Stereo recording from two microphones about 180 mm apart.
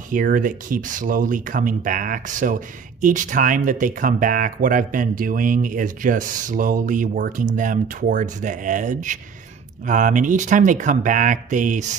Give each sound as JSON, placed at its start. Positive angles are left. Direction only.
{"t": 0.1, "sound": "speech", "side_deg": -50}